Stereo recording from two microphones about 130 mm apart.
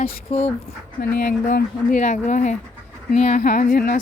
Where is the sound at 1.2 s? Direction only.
85° left.